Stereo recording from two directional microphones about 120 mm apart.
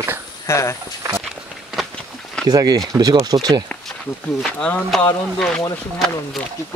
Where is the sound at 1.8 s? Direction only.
Centre (ahead or behind).